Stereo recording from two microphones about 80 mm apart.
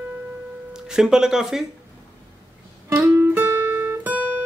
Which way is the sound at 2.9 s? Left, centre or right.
Right.